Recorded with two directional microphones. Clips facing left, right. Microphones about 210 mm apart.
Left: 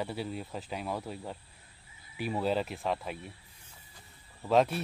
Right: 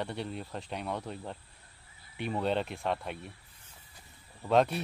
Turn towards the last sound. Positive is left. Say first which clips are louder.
# even
turn(degrees=0)  # may be behind; listen again after turning